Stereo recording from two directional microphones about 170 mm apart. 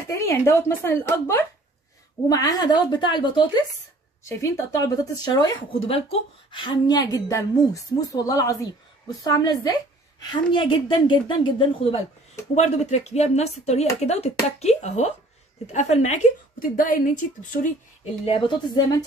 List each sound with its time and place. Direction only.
0.1 s a woman's voice: 15° left (ahead or behind); by 16.2 s 45° left (ahead or behind)
16.7 s speech: 55° left (ahead or behind)
18.2 s speech: 30° left (ahead or behind)